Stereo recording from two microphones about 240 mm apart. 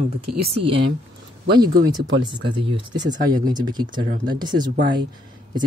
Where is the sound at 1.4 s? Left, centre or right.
Right.